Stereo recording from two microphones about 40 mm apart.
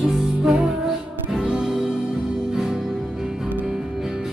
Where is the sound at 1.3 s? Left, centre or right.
Centre.